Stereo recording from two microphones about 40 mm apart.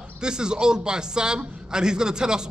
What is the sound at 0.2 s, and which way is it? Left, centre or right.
A man's voice, centre.